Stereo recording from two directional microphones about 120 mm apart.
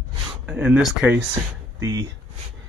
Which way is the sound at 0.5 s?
15° right (ahead or behind).